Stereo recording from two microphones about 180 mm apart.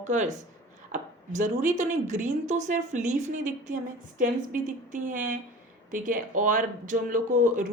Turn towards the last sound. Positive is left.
turn(degrees=-45)  # may be behind; listen again after turning